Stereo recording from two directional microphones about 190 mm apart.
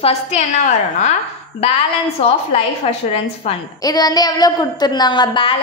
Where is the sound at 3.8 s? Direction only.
20° left (ahead or behind).